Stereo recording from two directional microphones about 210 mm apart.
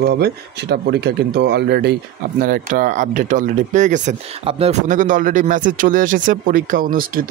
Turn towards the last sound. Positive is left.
turn(degrees=-40)  # may be behind; listen again after turning